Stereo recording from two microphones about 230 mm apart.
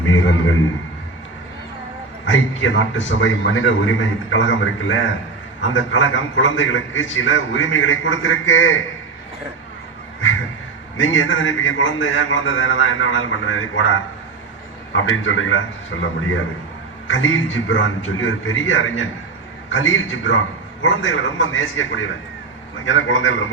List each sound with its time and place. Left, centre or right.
0.0 s a man's voice: left
2.2 s a man's voice: left
10.9 s a man's voice: left
17.1 s a man's voice: left